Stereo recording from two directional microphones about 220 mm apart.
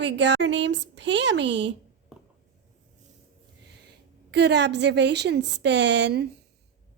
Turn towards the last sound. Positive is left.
turn(degrees=-55)  # may be behind; listen again after turning